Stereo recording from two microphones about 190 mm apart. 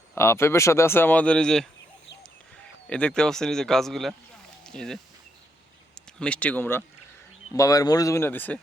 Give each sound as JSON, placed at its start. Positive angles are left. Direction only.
{"t": 0.1, "sound": "speech", "side_deg": 15}
{"t": 2.9, "sound": "speech", "side_deg": 5}